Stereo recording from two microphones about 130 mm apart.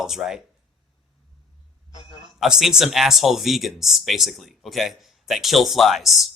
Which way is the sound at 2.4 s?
5° right (ahead or behind).